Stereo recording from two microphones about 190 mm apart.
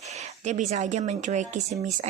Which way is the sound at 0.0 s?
35° right (ahead or behind).